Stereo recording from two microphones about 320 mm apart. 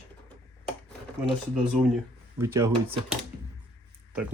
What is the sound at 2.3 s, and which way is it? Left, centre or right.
Speech, centre.